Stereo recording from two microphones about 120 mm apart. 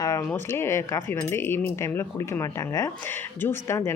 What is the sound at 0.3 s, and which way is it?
Speech, 20° left (ahead or behind).